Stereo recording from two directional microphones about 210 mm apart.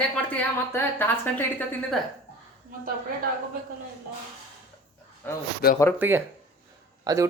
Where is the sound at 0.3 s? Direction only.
10° left (ahead or behind).